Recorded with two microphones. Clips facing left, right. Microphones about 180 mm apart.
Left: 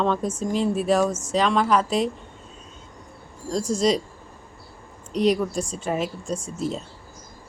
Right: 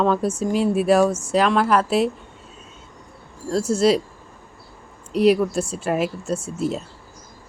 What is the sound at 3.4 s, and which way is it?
Speech, 5° right (ahead or behind).